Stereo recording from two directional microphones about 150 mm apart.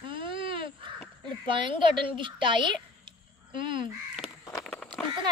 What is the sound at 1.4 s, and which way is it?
Speech, 35° right (ahead or behind).